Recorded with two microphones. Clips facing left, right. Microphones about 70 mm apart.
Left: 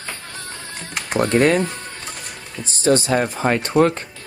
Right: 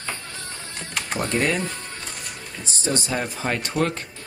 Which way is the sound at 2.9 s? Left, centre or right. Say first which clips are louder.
Left 9 dB; left.